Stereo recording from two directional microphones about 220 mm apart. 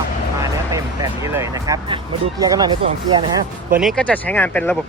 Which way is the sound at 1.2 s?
15° right (ahead or behind).